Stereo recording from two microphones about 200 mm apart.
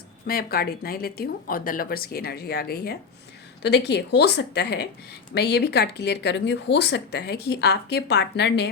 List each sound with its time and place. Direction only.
0.3 s speech: 50° left (ahead or behind)